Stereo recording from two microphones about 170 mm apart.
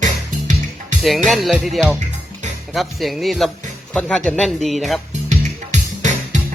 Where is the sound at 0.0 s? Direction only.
45° right (ahead or behind).